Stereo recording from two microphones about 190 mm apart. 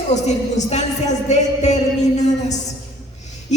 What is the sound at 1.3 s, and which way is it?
Music, 35° left (ahead or behind).